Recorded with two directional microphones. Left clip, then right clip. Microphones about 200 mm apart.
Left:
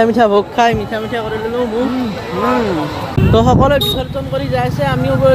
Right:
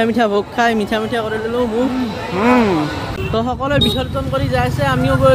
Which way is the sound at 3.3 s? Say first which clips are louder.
Left 8 dB; 15° left (ahead or behind).